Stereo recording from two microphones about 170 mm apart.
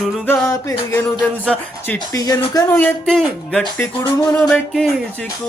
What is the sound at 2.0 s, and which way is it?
Speech, 20° left (ahead or behind).